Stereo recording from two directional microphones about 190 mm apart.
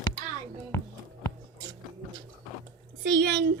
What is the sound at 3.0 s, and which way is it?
Speech, 60° right (ahead or behind).